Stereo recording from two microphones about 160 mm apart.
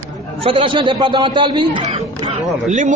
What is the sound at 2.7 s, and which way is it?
Speech, 50° right (ahead or behind).